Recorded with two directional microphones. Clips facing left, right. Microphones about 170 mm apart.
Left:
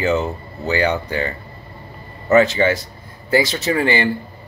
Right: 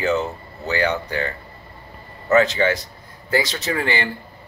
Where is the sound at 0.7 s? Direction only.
15° left (ahead or behind).